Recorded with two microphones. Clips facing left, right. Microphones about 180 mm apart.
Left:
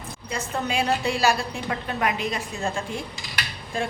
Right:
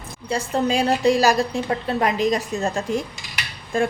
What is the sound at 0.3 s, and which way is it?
A woman's voice, 35° right (ahead or behind).